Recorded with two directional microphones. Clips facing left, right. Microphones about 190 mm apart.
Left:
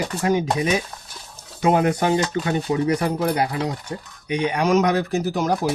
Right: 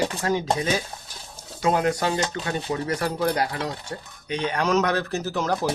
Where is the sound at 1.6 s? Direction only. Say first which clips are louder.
Left 4 dB; 20° left (ahead or behind).